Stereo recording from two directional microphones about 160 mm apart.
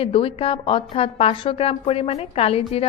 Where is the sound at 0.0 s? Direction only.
35° left (ahead or behind).